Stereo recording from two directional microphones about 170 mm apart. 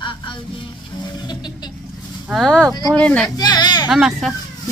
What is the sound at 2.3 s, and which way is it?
Speech, centre (ahead or behind).